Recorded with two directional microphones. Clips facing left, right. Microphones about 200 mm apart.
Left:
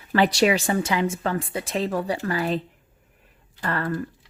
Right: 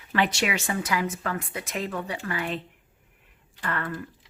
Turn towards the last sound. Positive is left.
turn(degrees=40)  # may be behind; listen again after turning